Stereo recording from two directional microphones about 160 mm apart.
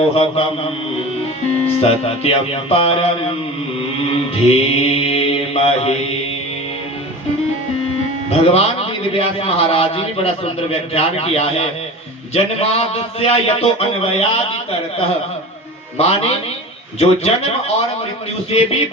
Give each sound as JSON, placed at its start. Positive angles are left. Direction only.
{"t": 0.1, "sound": "a man's voice", "side_deg": 40}
{"t": 1.6, "sound": "a man's voice", "side_deg": 40}
{"t": 4.4, "sound": "a man's voice", "side_deg": 40}
{"t": 8.3, "sound": "a man's voice", "side_deg": 40}
{"t": 16.0, "sound": "a man's voice", "side_deg": 40}